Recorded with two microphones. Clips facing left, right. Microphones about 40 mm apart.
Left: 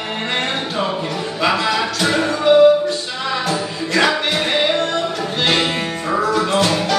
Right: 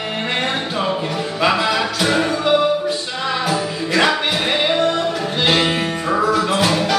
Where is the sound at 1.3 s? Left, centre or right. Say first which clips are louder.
Right 1 dB; centre.